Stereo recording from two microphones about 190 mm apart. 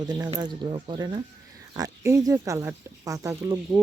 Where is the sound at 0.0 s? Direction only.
20° right (ahead or behind).